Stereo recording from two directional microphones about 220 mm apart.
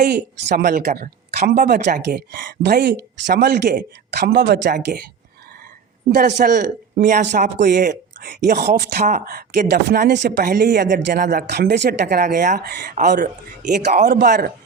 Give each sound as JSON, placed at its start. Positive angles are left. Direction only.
{"t": 0.5, "sound": "speech", "side_deg": -45}
{"t": 6.2, "sound": "a man's voice", "side_deg": -35}